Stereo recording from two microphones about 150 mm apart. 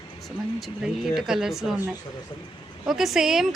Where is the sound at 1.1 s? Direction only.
5° right (ahead or behind).